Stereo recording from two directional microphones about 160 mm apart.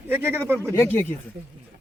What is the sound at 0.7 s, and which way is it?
Speech, 15° left (ahead or behind).